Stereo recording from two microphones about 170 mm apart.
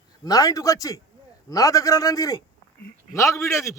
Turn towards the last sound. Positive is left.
turn(degrees=15)  # may be behind; listen again after turning